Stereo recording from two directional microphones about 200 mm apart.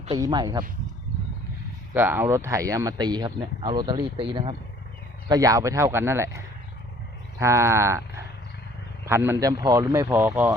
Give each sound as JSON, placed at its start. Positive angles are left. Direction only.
{"t": 0.1, "sound": "speech", "side_deg": -20}
{"t": 1.9, "sound": "speech", "side_deg": -10}
{"t": 7.3, "sound": "wild animals", "side_deg": -15}
{"t": 9.0, "sound": "speech", "side_deg": -10}